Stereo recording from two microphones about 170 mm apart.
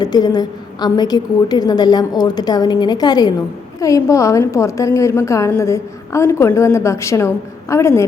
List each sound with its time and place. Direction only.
0.0 s a woman's voice: 25° left (ahead or behind)